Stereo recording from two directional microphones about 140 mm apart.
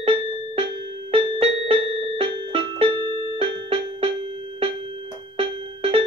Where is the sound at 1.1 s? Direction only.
35° right (ahead or behind).